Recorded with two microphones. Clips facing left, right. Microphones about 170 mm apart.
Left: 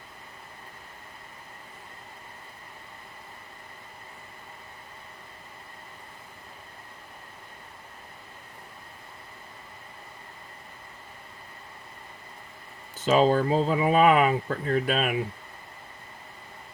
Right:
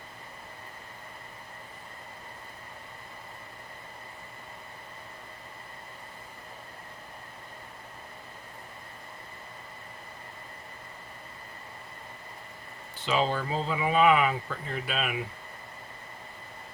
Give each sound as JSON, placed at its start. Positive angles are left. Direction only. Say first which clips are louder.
{"t": 13.0, "sound": "speech", "louder": "left 7 dB", "side_deg": 45}